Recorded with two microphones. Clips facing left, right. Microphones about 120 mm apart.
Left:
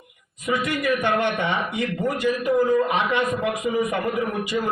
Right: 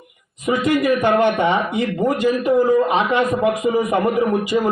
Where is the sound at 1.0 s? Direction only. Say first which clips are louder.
Right 7 dB; 35° right (ahead or behind).